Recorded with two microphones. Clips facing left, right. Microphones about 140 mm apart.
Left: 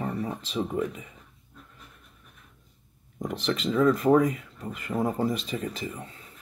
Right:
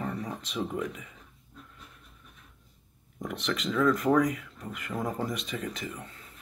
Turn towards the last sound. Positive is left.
turn(degrees=30)  # may be behind; listen again after turning